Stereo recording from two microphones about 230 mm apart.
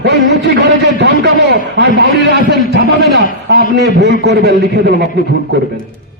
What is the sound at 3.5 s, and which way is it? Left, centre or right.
A man's voice, right.